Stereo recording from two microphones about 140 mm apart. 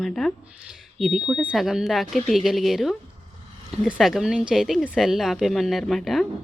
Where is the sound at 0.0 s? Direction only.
5° left (ahead or behind).